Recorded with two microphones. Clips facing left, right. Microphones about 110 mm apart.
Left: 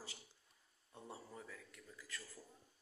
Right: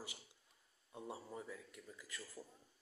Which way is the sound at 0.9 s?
15° right (ahead or behind).